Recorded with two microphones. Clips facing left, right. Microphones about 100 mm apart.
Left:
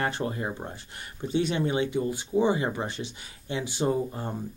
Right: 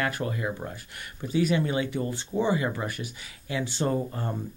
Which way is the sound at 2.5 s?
25° left (ahead or behind).